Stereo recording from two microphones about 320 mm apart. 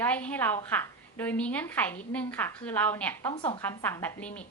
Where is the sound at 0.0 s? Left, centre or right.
Centre.